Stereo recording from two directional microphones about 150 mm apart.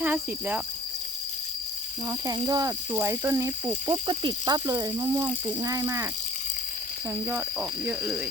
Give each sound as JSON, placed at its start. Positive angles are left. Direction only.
{"t": 0.0, "sound": "speech", "side_deg": -10}
{"t": 2.0, "sound": "speech", "side_deg": -25}
{"t": 7.3, "sound": "speech", "side_deg": -15}